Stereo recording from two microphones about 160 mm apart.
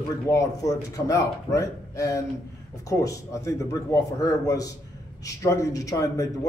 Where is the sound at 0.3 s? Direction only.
20° left (ahead or behind).